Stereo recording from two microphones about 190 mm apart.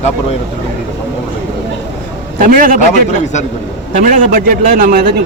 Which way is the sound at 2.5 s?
45° right (ahead or behind).